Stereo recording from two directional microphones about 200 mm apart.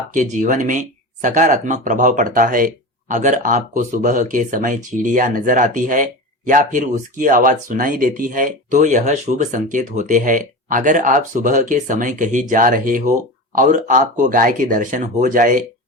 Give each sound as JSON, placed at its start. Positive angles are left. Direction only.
{"t": 0.1, "sound": "speech", "side_deg": -40}